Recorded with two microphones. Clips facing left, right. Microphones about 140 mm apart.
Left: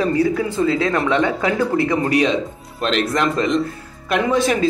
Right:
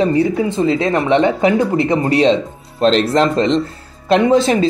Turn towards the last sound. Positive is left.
turn(degrees=-25)  # may be behind; listen again after turning